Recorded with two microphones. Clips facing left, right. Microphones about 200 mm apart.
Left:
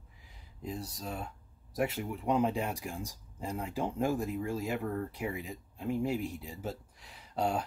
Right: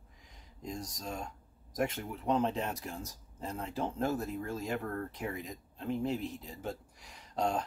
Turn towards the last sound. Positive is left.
turn(degrees=5)  # may be behind; listen again after turning